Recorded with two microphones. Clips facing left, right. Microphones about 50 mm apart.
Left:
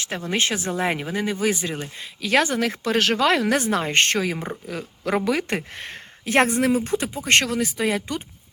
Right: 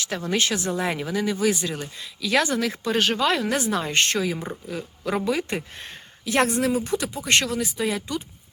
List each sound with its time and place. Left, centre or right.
0.3 s speech: left
0.8 s speech: left
2.6 s speech: left
3.6 s speech: left
5.2 s speech: left
7.3 s speech: left